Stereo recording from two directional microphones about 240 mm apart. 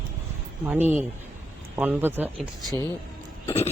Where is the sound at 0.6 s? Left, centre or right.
Centre.